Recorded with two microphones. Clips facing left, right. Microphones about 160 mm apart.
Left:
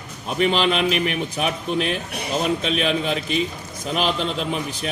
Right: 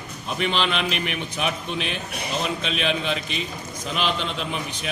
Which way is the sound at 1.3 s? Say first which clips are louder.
Left 2 dB; 45° left (ahead or behind).